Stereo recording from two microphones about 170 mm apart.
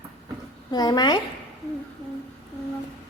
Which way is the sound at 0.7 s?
25° left (ahead or behind).